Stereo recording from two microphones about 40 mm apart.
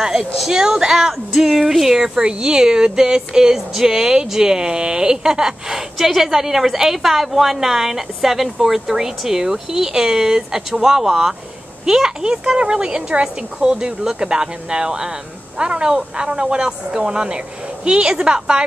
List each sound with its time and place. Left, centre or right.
0.0 s speech: centre
0.5 s a child's voice: centre